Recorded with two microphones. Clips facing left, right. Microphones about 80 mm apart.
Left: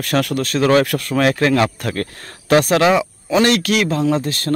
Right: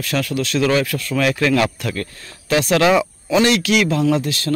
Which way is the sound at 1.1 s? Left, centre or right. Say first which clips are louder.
Left 1 dB; left.